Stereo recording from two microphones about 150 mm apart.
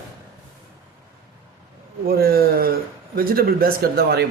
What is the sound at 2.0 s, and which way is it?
Speech, 90° right.